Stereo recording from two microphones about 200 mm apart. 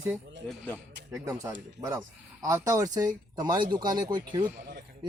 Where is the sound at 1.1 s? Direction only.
15° right (ahead or behind).